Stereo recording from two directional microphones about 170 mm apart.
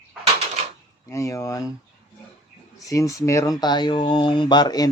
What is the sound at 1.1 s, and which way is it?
Speech, 15° left (ahead or behind).